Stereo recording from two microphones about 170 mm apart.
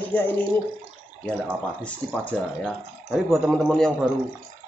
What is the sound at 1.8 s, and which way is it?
Speech, 5° left (ahead or behind).